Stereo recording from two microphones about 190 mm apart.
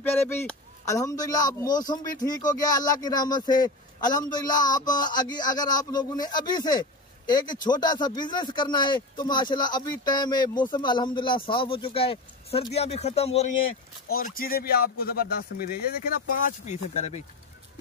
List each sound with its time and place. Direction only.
0.4 s a man's voice: 15° left (ahead or behind); by 13.5 s 35° left (ahead or behind)
14.1 s speech: 50° left (ahead or behind)